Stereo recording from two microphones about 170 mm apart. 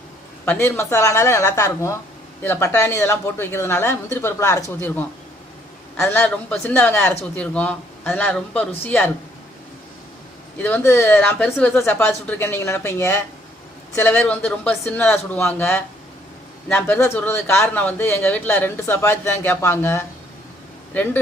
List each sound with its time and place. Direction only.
0.4 s speech: 10° left (ahead or behind)
10.6 s speech: 10° left (ahead or behind)